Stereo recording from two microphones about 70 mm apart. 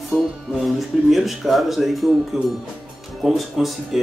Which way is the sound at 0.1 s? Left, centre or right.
Centre.